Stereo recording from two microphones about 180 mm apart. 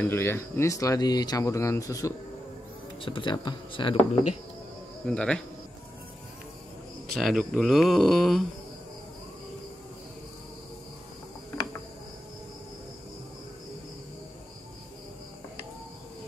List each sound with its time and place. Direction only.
0.0 s speech: 10° left (ahead or behind)
5.0 s speech: 5° left (ahead or behind)
7.2 s speech: centre (ahead or behind)